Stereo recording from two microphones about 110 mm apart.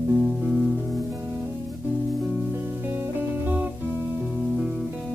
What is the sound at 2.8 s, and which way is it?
Music, 20° right (ahead or behind).